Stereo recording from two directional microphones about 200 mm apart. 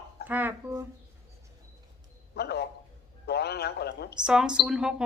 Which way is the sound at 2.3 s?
55° left (ahead or behind).